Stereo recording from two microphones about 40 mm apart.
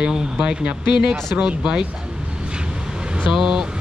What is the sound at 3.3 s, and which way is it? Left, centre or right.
Speech, centre.